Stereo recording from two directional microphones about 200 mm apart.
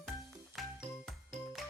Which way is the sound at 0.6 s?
Centre (ahead or behind).